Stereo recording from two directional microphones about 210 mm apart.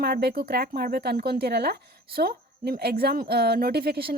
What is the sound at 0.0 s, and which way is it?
Speech, 50° right (ahead or behind).